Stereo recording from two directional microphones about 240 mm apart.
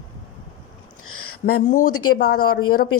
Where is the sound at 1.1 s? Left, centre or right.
Left.